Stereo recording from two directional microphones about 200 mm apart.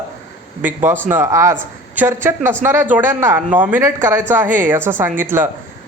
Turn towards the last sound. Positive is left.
turn(degrees=-10)  # may be behind; listen again after turning